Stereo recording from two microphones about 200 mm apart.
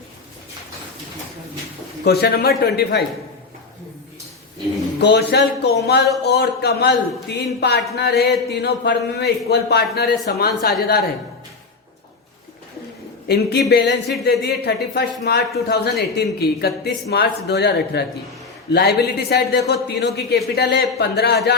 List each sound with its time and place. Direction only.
2.0 s speech: 50° left (ahead or behind)
4.9 s speech: 55° left (ahead or behind)
13.2 s speech: 55° left (ahead or behind)